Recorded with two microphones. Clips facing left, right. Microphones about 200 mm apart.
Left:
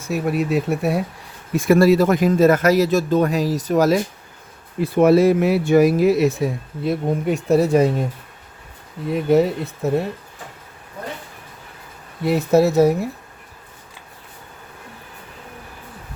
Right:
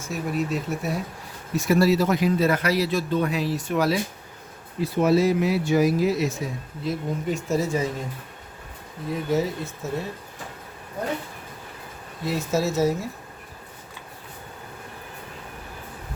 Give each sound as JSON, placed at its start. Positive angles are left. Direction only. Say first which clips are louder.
{"t": 0.1, "sound": "speech", "louder": "left 6 dB", "side_deg": 65}
{"t": 1.5, "sound": "speech", "louder": "left 6 dB", "side_deg": 50}
{"t": 4.8, "sound": "speech", "louder": "left 6 dB", "side_deg": 60}
{"t": 9.3, "sound": "speech", "louder": "left 9 dB", "side_deg": 65}
{"t": 12.2, "sound": "speech", "louder": "left 9 dB", "side_deg": 60}